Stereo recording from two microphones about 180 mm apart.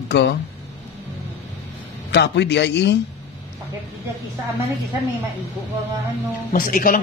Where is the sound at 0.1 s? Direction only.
70° left (ahead or behind).